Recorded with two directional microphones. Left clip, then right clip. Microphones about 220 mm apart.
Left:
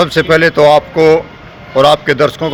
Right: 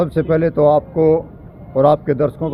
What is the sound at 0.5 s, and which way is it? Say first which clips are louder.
Speech: left 4 dB; 25° left (ahead or behind).